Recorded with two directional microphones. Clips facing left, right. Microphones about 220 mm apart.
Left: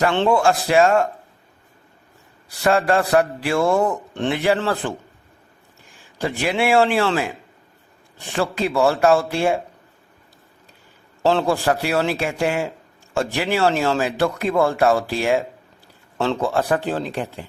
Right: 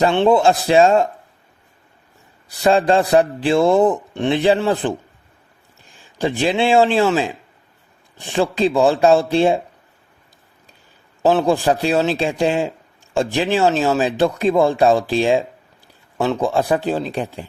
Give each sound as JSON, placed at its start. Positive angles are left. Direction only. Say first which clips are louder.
{"t": 0.0, "sound": "speech", "louder": "right 3 dB", "side_deg": -20}
{"t": 2.6, "sound": "speech", "louder": "right 3 dB", "side_deg": -20}
{"t": 6.1, "sound": "speech", "louder": "right 4 dB", "side_deg": -20}
{"t": 11.3, "sound": "a man's voice", "louder": "right 3 dB", "side_deg": -15}